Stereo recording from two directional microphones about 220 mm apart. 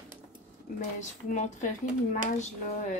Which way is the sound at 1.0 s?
35° left (ahead or behind).